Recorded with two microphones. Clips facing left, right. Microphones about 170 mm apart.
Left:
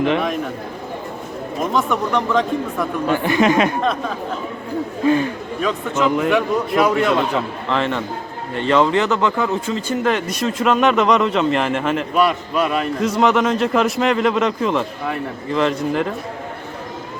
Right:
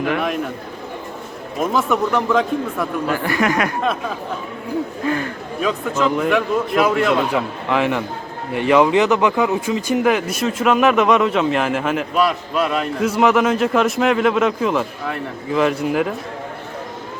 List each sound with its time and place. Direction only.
1.7 s speech: 5° right (ahead or behind)
3.1 s speech: 20° left (ahead or behind)
5.0 s speech: 20° left (ahead or behind)
5.5 s speech: centre (ahead or behind)